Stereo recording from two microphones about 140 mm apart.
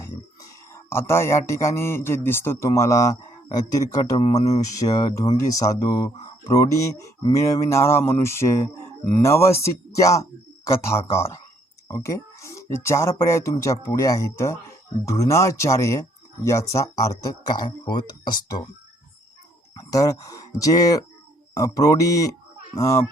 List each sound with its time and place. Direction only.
0.7 s speech: 20° left (ahead or behind)
4.8 s speech: 40° left (ahead or behind)
5.3 s speech: 25° left (ahead or behind)
11.9 s music: 25° left (ahead or behind)
12.7 s speech: 20° left (ahead or behind)
19.9 s speech: 25° left (ahead or behind)